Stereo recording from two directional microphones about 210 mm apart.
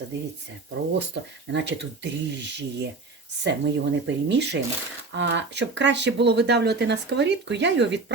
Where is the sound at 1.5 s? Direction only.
55° right (ahead or behind).